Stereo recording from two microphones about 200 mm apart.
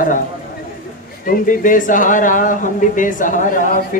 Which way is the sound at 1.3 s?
40° left (ahead or behind).